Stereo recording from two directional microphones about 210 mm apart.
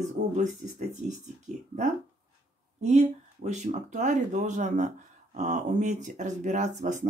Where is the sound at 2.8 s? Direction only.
35° right (ahead or behind).